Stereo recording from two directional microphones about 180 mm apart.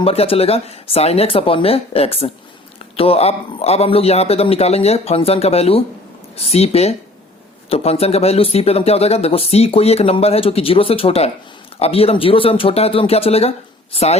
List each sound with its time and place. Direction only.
0.0 s a man's voice: 30° left (ahead or behind)